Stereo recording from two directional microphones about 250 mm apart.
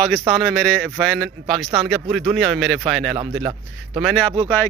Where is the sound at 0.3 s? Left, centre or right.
Centre.